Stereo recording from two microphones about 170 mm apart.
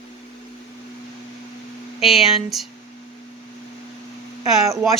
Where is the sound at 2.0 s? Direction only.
Centre (ahead or behind).